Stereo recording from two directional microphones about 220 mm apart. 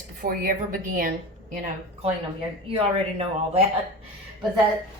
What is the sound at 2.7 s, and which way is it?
Speech, 25° right (ahead or behind).